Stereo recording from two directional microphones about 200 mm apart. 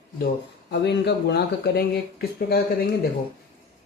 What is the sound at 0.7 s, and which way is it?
Speech, 60° left (ahead or behind).